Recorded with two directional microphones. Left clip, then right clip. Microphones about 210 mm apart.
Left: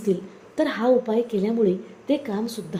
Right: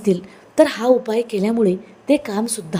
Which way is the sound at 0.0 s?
25° right (ahead or behind).